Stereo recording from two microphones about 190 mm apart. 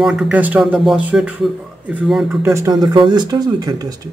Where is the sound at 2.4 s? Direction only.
15° right (ahead or behind).